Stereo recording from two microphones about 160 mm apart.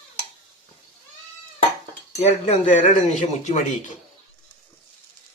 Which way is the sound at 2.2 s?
45° left (ahead or behind).